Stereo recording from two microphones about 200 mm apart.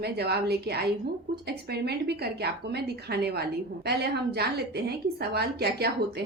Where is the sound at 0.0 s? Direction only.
55° right (ahead or behind).